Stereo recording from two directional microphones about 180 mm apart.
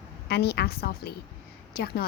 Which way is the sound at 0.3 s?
65° left (ahead or behind).